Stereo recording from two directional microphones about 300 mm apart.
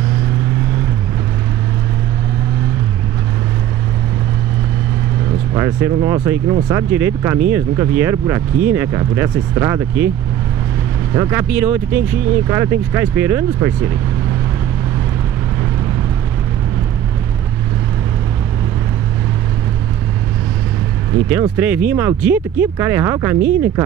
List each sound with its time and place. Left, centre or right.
5.5 s speech: centre
11.1 s speech: centre
21.3 s speech: centre